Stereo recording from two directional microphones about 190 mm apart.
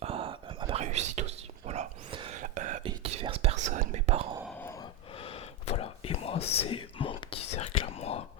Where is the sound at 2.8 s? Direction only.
30° right (ahead or behind).